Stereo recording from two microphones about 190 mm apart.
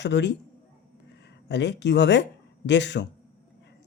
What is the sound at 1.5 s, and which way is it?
Speech, 65° left (ahead or behind).